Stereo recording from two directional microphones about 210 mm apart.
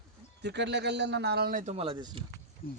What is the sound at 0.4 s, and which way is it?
A man's voice, 55° right (ahead or behind).